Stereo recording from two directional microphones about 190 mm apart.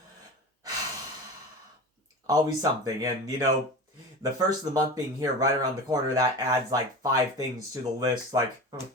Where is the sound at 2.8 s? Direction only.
20° right (ahead or behind).